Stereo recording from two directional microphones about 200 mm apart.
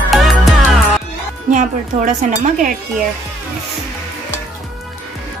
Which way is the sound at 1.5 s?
40° right (ahead or behind).